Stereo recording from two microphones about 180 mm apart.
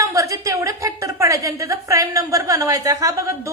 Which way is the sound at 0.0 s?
20° right (ahead or behind).